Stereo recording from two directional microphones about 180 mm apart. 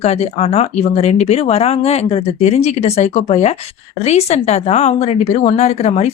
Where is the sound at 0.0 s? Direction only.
35° left (ahead or behind).